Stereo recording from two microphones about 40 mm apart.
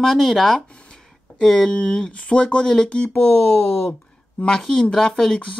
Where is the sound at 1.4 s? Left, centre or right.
Centre.